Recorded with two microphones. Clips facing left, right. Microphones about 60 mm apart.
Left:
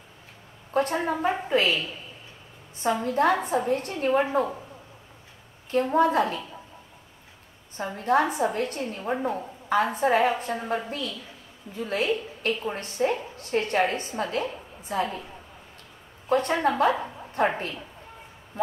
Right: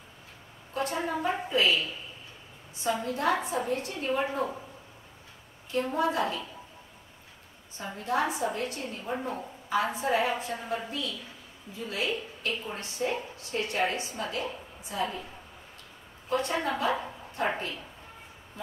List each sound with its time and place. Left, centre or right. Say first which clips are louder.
0.7 s a woman's voice: left 5 dB; left
2.8 s a woman's voice: left 6 dB; left
5.7 s a woman's voice: left 6 dB; left
7.7 s a woman's voice: left 7 dB; left
16.3 s a woman's voice: left 6 dB; left